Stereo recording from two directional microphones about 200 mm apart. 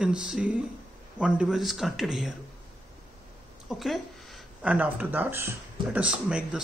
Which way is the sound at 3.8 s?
Centre (ahead or behind).